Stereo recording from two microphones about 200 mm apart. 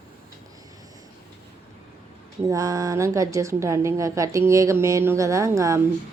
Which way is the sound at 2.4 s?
15° right (ahead or behind).